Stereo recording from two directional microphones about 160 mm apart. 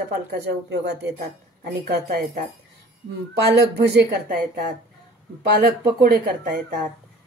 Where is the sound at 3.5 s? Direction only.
90° right.